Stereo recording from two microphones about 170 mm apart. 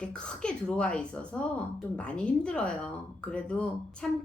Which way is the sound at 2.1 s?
5° left (ahead or behind).